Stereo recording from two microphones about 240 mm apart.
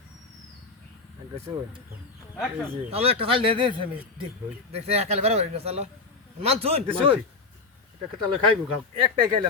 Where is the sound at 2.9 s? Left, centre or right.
Right.